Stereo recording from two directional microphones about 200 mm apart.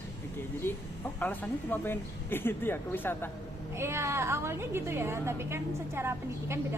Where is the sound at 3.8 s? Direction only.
15° right (ahead or behind).